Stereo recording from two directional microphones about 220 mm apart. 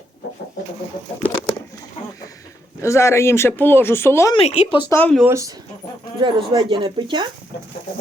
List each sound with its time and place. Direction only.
2.8 s speech: 15° left (ahead or behind)
4.4 s speech: 30° left (ahead or behind)
4.9 s speech: 10° left (ahead or behind)
5.2 s speech: 15° right (ahead or behind)